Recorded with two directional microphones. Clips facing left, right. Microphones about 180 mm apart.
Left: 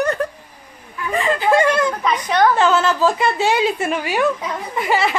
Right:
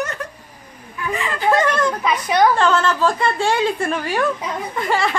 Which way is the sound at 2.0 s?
10° right (ahead or behind).